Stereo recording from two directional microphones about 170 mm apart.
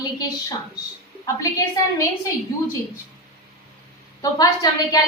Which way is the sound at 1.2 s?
20° left (ahead or behind).